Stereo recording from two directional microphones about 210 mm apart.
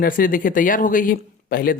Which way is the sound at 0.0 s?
40° left (ahead or behind).